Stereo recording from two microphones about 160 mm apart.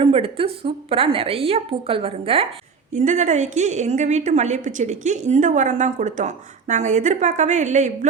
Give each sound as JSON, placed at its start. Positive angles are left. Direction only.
{"t": 0.0, "sound": "a woman's voice", "side_deg": -35}
{"t": 2.9, "sound": "a woman's voice", "side_deg": -50}